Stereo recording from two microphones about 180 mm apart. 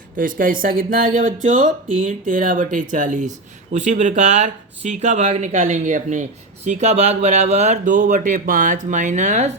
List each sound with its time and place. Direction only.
0.2 s speech: 50° right (ahead or behind)